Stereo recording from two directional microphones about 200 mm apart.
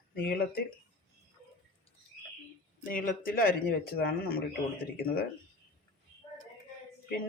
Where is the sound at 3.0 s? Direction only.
45° left (ahead or behind).